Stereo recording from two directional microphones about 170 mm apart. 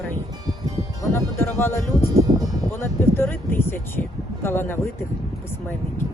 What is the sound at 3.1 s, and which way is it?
Speech, 10° left (ahead or behind).